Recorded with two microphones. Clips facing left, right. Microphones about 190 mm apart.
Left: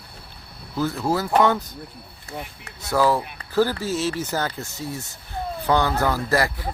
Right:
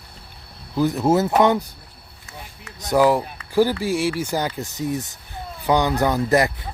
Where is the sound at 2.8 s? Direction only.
15° right (ahead or behind).